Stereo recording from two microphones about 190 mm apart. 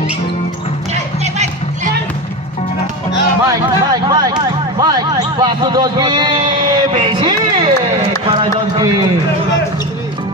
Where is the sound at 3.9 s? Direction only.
20° right (ahead or behind).